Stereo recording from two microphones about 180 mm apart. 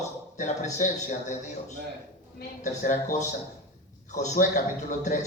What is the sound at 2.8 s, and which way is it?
A man's voice, 40° left (ahead or behind).